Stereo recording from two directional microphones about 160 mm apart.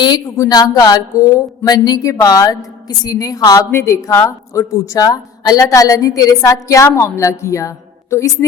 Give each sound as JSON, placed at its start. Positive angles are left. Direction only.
{"t": 0.0, "sound": "a woman's voice", "side_deg": 25}